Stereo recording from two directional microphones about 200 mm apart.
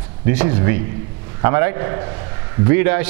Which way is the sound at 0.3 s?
15° right (ahead or behind).